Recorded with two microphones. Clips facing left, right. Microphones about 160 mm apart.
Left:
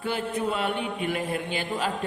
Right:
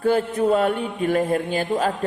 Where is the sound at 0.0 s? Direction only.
40° right (ahead or behind).